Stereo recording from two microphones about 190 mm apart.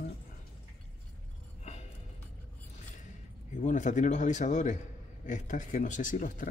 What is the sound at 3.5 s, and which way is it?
A man's voice, 40° left (ahead or behind).